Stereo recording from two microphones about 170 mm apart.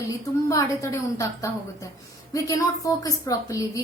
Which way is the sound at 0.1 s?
20° left (ahead or behind).